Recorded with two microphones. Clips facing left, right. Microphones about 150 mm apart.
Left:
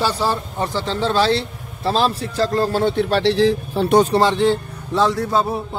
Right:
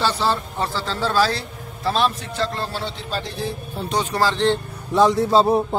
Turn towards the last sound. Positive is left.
turn(degrees=-40)  # may be behind; listen again after turning